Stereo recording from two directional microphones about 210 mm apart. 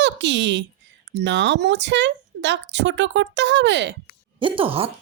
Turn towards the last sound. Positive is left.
turn(degrees=-25)  # may be behind; listen again after turning